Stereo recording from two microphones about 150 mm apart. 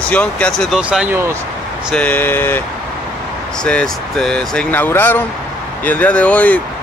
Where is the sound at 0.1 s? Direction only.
10° left (ahead or behind); by 1.2 s 10° right (ahead or behind).